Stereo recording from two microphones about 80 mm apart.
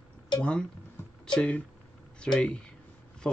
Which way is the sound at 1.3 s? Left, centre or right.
Centre.